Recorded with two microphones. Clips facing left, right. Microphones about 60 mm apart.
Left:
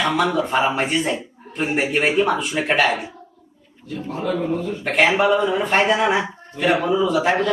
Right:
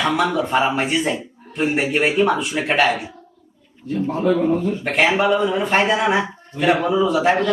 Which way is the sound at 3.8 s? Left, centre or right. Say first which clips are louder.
Right 6 dB; right.